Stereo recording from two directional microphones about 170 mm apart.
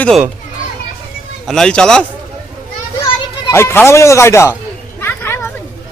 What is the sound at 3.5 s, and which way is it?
Speech, 15° left (ahead or behind).